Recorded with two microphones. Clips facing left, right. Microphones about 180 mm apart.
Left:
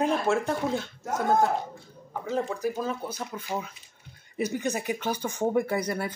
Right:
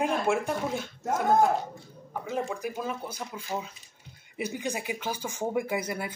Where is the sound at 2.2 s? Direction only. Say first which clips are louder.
Left 4 dB; 15° right (ahead or behind).